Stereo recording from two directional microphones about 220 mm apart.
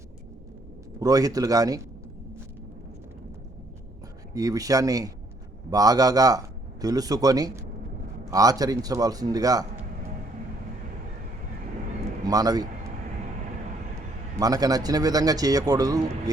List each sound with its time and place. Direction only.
0.9 s speech: 15° right (ahead or behind)
4.4 s speech: 15° right (ahead or behind)
12.2 s a man's voice: 15° right (ahead or behind)
14.3 s speech: 15° right (ahead or behind)